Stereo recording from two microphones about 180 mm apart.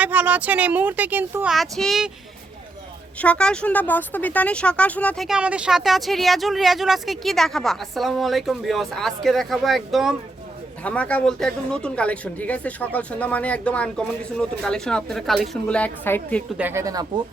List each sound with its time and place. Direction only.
0.0 s speech: 10° right (ahead or behind)
1.5 s speech: centre (ahead or behind)
3.2 s speech: 5° left (ahead or behind)
16.6 s speech: 10° right (ahead or behind)